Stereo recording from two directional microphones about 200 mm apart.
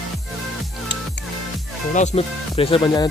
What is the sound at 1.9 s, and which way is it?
Speech, 35° left (ahead or behind).